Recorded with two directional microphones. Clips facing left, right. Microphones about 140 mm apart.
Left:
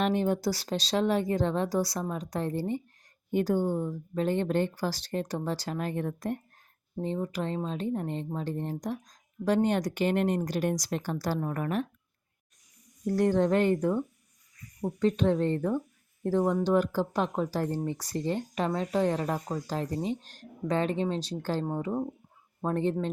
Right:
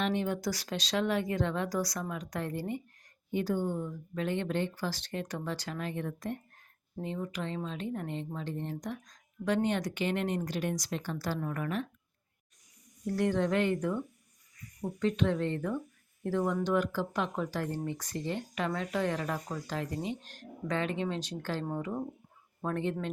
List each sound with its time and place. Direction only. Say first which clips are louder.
0.0 s speech: left 5 dB; 40° left (ahead or behind)
3.3 s speech: left 5 dB; 45° left (ahead or behind)
13.1 s speech: left 4 dB; 40° left (ahead or behind)